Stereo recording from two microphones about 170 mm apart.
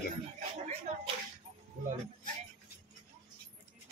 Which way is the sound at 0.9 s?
40° right (ahead or behind).